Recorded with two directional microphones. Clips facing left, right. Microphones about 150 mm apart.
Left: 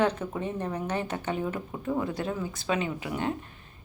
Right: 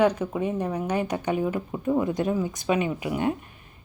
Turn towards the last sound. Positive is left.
turn(degrees=-15)  # may be behind; listen again after turning